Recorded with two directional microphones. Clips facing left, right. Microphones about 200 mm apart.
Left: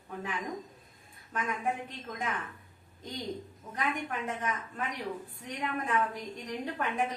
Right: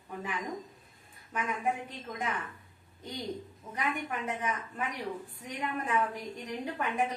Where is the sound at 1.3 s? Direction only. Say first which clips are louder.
Right 1 dB; 10° right (ahead or behind).